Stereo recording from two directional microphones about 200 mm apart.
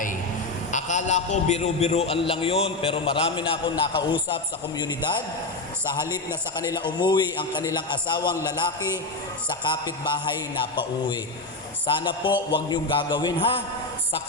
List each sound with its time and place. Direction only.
0.7 s a man's voice: 35° left (ahead or behind)
6.6 s a man's voice: 20° left (ahead or behind)
9.8 s a man's voice: 25° left (ahead or behind)
11.9 s a man's voice: 25° left (ahead or behind)